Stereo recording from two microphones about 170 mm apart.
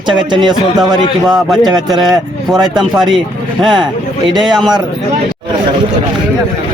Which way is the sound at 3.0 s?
Centre (ahead or behind).